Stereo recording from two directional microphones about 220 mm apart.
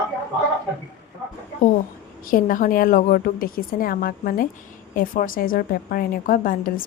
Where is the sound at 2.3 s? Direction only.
40° left (ahead or behind).